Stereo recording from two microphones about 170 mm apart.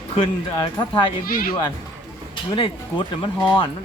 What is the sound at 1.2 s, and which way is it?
Speech, 60° left (ahead or behind).